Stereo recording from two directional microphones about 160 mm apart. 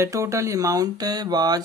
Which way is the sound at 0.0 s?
20° right (ahead or behind).